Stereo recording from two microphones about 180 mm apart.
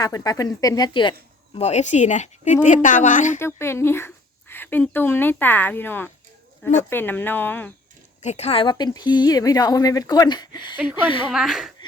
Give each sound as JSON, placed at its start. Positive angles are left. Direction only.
{"t": 0.0, "sound": "speech", "side_deg": 20}
{"t": 1.5, "sound": "a woman's voice", "side_deg": 40}
{"t": 3.3, "sound": "speech", "side_deg": 15}
{"t": 8.2, "sound": "a woman's voice", "side_deg": 40}
{"t": 11.3, "sound": "speech", "side_deg": 0}